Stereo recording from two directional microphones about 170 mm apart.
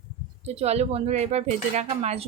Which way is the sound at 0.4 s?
40° right (ahead or behind).